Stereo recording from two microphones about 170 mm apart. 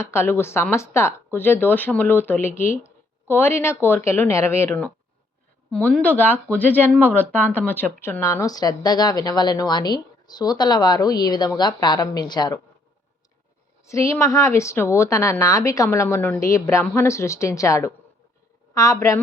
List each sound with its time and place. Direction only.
0.0 s a woman's voice: 15° left (ahead or behind)
13.8 s a woman's voice: 20° left (ahead or behind)